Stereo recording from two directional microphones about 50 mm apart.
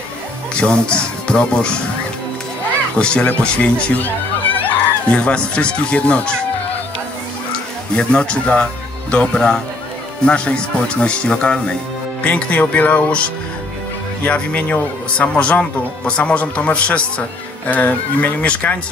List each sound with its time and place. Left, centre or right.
0.6 s speech: left
3.0 s speech: left
3.9 s music: left
5.1 s speech: left
7.9 s speech: left